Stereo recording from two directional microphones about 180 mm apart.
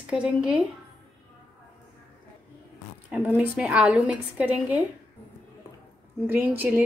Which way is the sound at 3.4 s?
5° right (ahead or behind).